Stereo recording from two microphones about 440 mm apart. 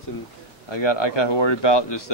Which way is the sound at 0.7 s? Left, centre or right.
Left.